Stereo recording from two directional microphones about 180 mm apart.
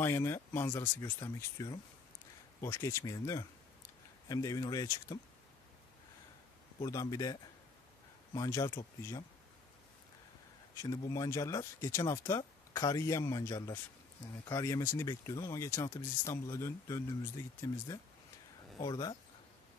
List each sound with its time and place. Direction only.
0.0 s speech: 15° left (ahead or behind)
6.8 s speech: 20° left (ahead or behind)
8.4 s speech: 20° left (ahead or behind)
10.7 s speech: 20° left (ahead or behind)